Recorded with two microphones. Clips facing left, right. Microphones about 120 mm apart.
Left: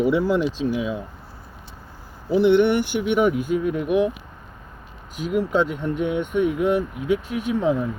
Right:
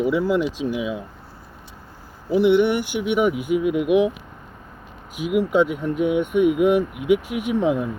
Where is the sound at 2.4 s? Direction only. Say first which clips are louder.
Even; 5° right (ahead or behind).